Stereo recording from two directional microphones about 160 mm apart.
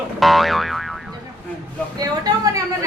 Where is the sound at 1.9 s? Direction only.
25° right (ahead or behind).